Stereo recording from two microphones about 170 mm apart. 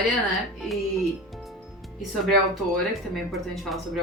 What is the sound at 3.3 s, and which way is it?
Speech, centre (ahead or behind).